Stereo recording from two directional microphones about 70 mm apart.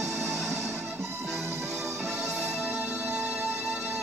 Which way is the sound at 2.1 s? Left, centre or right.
Centre.